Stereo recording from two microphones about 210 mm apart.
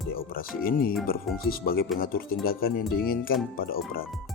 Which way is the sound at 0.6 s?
45° left (ahead or behind).